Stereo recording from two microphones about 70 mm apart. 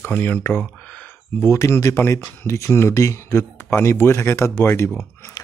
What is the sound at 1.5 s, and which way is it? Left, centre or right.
Speech, left.